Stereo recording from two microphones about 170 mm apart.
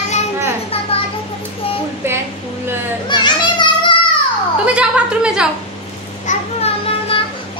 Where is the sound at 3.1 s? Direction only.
25° left (ahead or behind).